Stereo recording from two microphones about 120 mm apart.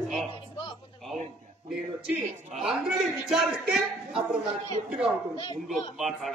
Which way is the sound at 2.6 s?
Centre (ahead or behind).